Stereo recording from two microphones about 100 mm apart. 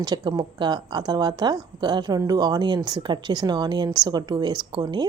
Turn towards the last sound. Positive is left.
turn(degrees=-45)  # may be behind; listen again after turning